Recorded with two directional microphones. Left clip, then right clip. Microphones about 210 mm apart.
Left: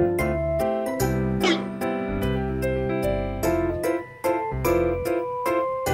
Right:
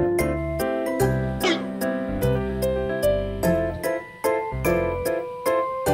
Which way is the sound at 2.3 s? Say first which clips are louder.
Right 5 dB; 15° right (ahead or behind).